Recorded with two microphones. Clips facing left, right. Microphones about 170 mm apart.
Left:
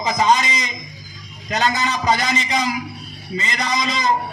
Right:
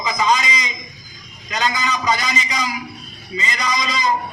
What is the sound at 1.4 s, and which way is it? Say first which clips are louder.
A man's voice: left 2 dB; 50° left (ahead or behind).